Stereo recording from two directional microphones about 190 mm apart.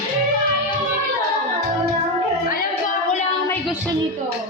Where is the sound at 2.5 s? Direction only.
40° left (ahead or behind).